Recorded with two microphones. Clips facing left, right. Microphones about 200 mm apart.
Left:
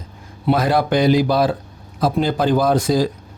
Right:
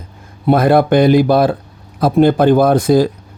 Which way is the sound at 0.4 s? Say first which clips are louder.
Right 6 dB; 55° right (ahead or behind).